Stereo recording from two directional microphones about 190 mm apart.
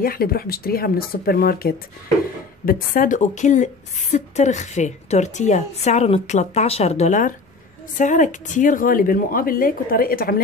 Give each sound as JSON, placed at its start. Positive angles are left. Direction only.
{"t": 0.0, "sound": "a woman's voice", "side_deg": 50}